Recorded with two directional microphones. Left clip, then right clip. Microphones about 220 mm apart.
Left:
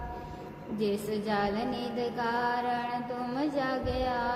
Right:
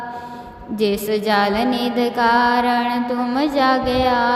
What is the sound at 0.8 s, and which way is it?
Music, 35° right (ahead or behind).